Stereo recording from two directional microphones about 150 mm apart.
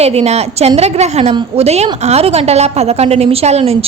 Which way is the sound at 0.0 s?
45° right (ahead or behind).